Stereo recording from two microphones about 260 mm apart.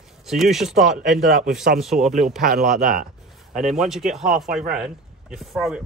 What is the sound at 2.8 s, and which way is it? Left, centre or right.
Speech, right.